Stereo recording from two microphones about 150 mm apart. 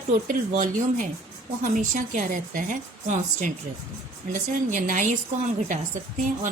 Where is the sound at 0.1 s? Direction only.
65° right (ahead or behind).